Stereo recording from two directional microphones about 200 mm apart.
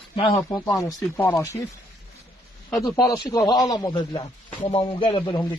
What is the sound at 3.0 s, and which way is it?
Speech, 20° left (ahead or behind).